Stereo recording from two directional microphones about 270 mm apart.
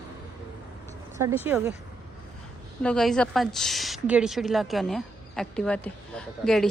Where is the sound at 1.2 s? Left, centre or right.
Centre.